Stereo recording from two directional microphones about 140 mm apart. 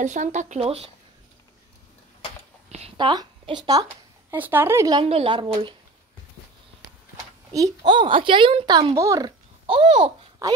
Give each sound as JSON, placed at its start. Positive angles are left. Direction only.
{"t": 0.0, "sound": "speech", "side_deg": -60}
{"t": 3.0, "sound": "speech", "side_deg": -35}
{"t": 4.3, "sound": "a woman's voice", "side_deg": -15}
{"t": 5.0, "sound": "speech", "side_deg": -40}
{"t": 7.5, "sound": "speech", "side_deg": -30}
{"t": 9.8, "sound": "speech", "side_deg": -55}
{"t": 10.4, "sound": "speech", "side_deg": -20}